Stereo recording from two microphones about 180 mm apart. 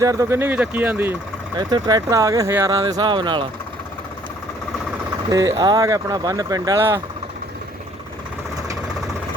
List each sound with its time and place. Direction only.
0.0 s speech: 20° right (ahead or behind)
1.5 s speech: 25° right (ahead or behind)
5.3 s speech: 20° right (ahead or behind)